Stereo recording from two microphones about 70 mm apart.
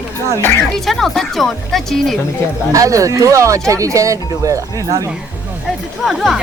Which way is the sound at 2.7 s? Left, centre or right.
Right.